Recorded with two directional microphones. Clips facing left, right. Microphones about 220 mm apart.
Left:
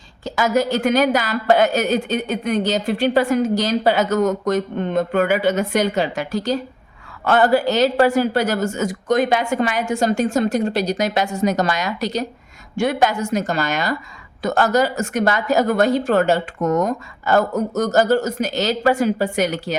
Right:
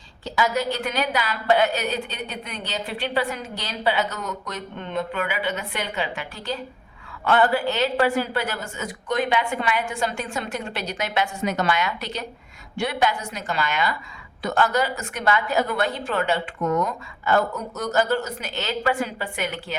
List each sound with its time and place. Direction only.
0.3 s a woman's voice: 45° left (ahead or behind)